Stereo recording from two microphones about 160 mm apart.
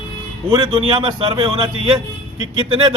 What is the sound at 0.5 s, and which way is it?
A man's voice, 30° right (ahead or behind).